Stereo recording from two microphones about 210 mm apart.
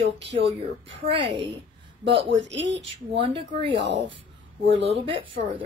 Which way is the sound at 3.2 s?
25° right (ahead or behind).